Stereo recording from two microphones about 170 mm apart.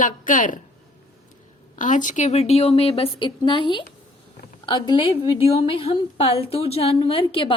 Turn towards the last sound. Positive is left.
turn(degrees=30)  # may be behind; listen again after turning